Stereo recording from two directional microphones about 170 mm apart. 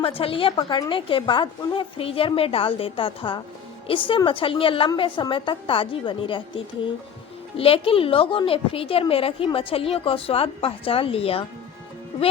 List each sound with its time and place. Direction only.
0.0 s a woman's voice: 30° left (ahead or behind)
7.5 s a woman's voice: 35° left (ahead or behind)